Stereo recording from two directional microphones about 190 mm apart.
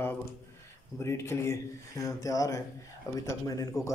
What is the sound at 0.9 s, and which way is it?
Speech, 15° left (ahead or behind).